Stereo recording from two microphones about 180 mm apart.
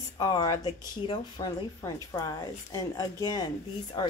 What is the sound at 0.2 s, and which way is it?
Speech, 20° left (ahead or behind).